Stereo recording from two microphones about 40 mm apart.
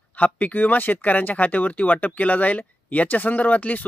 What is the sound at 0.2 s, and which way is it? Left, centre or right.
Speech, left.